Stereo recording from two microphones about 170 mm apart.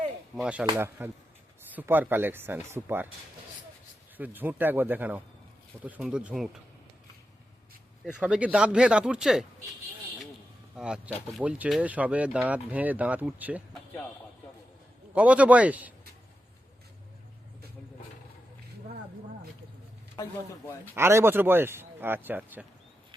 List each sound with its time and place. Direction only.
0.6 s speech: 15° right (ahead or behind)
4.2 s speech: 10° right (ahead or behind)
8.0 s speech: 5° right (ahead or behind)
10.8 s speech: 5° right (ahead or behind)
15.1 s speech: 10° right (ahead or behind)
20.2 s speech: 25° left (ahead or behind)
20.9 s speech: 15° right (ahead or behind)